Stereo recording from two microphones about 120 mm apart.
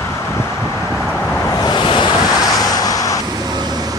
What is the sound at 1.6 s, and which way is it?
Waves, 40° left (ahead or behind).